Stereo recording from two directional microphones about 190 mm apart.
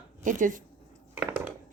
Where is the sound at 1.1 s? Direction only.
10° right (ahead or behind).